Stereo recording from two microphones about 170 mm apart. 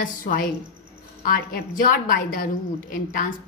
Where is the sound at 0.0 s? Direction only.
55° left (ahead or behind).